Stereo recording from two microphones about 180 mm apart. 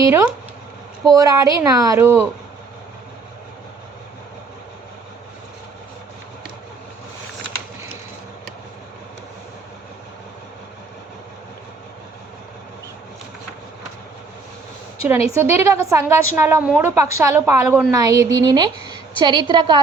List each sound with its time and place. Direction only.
0.0 s a woman's voice: 15° right (ahead or behind)
15.4 s a woman's voice: 15° right (ahead or behind)